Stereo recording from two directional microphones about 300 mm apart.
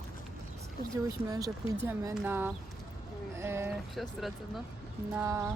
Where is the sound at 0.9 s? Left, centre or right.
Centre.